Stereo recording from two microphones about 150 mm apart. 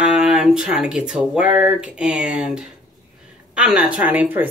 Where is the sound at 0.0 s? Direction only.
5° right (ahead or behind).